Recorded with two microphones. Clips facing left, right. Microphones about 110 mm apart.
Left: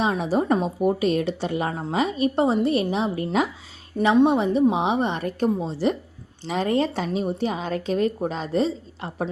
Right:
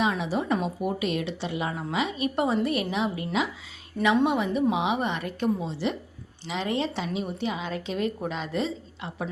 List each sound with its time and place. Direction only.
0.0 s a woman's voice: 35° left (ahead or behind)